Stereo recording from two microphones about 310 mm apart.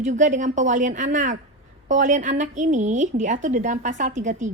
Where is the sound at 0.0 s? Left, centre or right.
Right.